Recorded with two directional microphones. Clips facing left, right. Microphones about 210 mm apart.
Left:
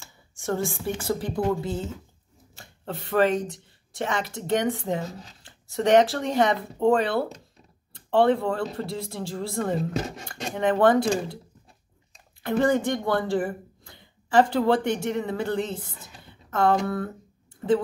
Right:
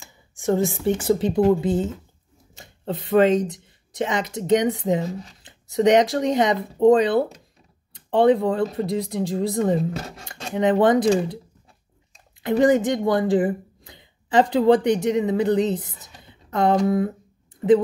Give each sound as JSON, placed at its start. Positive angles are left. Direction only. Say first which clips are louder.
{"t": 0.0, "sound": "speech", "louder": "right 8 dB", "side_deg": -15}
{"t": 12.4, "sound": "speech", "louder": "right 5 dB", "side_deg": -15}